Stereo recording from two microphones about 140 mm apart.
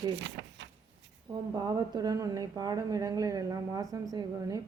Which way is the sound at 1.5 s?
30° right (ahead or behind).